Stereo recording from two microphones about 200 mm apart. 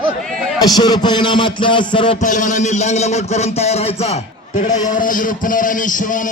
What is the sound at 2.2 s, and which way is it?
A man's voice, 40° left (ahead or behind).